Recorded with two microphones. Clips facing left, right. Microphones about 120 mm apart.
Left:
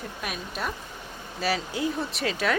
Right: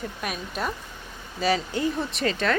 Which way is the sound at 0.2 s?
Centre (ahead or behind).